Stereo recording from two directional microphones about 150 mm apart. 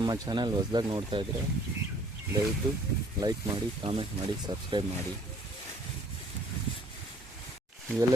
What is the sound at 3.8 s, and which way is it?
Speech, 30° right (ahead or behind).